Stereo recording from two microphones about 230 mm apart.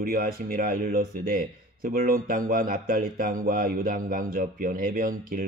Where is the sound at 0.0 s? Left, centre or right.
Right.